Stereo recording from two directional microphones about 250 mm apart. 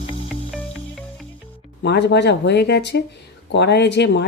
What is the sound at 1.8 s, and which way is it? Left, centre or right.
Speech, left.